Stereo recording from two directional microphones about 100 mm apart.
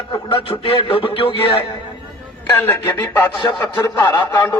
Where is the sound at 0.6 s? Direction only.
60° left (ahead or behind).